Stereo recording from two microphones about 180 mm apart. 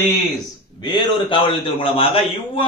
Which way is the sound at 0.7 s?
25° left (ahead or behind).